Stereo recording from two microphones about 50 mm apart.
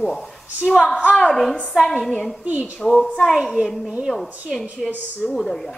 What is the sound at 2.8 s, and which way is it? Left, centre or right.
A child's voice, centre.